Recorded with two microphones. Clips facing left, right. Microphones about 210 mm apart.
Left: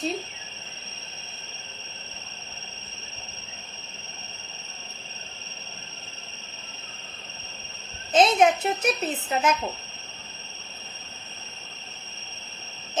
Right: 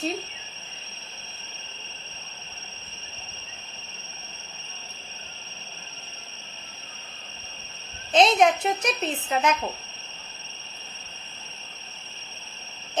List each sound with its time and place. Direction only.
8.1 s a woman's voice: 5° left (ahead or behind)